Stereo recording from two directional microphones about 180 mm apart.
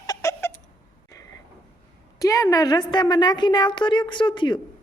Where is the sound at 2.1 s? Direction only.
20° left (ahead or behind).